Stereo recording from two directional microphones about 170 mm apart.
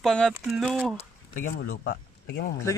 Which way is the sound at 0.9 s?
50° left (ahead or behind).